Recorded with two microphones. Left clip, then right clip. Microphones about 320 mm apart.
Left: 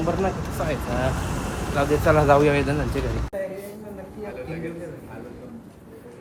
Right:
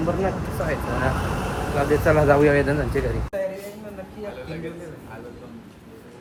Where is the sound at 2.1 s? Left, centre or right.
Centre.